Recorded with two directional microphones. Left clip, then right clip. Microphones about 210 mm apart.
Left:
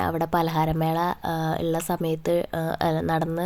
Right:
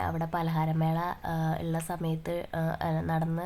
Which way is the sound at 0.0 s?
30° left (ahead or behind).